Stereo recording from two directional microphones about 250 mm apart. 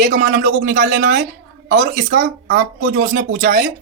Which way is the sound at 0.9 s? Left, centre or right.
Right.